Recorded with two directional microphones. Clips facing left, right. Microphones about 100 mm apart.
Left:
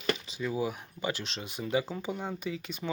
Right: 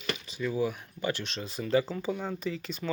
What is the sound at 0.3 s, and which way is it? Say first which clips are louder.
Speech: right 2 dB; 15° left (ahead or behind).